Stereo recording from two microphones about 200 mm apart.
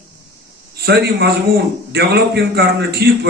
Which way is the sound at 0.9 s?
55° right (ahead or behind).